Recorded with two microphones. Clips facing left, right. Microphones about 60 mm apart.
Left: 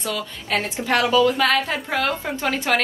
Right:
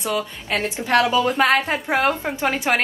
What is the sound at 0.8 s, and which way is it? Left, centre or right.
A woman's voice, right.